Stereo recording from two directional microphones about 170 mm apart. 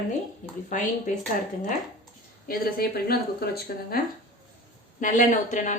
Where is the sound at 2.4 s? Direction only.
60° left (ahead or behind).